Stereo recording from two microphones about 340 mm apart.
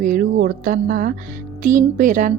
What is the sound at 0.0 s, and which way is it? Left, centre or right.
Speech, right.